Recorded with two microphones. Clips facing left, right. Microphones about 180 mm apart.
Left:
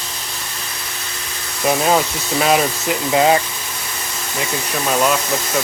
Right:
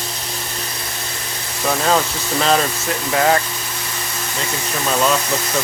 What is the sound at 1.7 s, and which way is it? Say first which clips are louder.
Speech: left 2 dB; 15° left (ahead or behind).